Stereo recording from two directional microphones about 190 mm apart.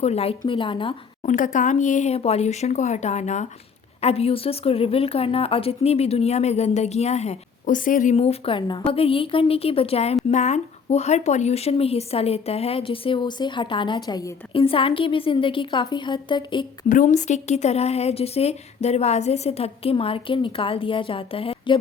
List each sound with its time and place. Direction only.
0.0 s a woman's voice: 35° left (ahead or behind)
1.2 s a woman's voice: 40° left (ahead or behind)
16.9 s speech: 40° left (ahead or behind)